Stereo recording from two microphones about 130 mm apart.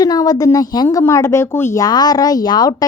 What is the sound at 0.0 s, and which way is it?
Speech, 30° left (ahead or behind).